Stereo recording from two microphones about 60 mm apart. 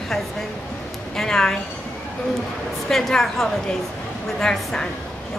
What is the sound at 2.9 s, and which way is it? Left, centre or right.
A woman's voice, centre.